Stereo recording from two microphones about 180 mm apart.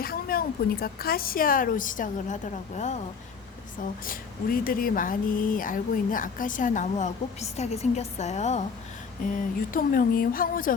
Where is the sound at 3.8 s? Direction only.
50° left (ahead or behind).